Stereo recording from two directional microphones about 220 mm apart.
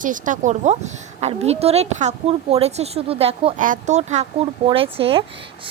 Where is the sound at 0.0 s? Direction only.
35° right (ahead or behind).